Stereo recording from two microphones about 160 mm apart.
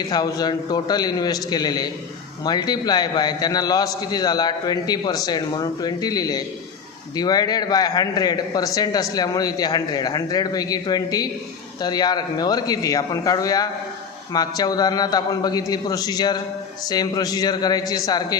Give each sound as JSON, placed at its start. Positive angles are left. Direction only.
{"t": 0.1, "sound": "a man's voice", "side_deg": 25}